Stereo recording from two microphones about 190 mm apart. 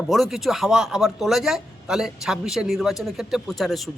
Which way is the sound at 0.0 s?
Centre (ahead or behind).